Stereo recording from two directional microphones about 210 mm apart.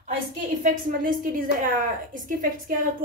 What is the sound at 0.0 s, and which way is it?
A woman's voice, 35° right (ahead or behind).